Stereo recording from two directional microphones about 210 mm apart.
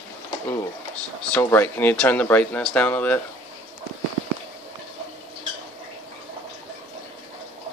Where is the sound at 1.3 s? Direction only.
10° left (ahead or behind).